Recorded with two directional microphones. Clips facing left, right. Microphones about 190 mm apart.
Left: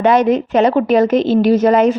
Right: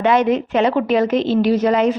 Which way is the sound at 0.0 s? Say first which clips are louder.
Left 3 dB; 40° left (ahead or behind).